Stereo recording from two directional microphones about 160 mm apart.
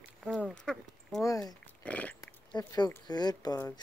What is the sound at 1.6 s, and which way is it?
Dog, 10° left (ahead or behind).